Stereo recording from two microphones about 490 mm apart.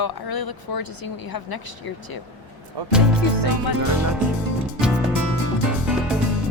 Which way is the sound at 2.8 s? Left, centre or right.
Right.